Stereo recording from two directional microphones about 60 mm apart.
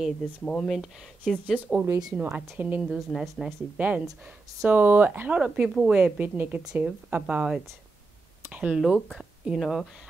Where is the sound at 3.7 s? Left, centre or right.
Right.